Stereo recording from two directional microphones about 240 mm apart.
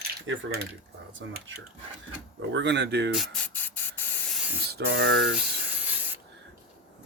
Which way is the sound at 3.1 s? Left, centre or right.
Centre.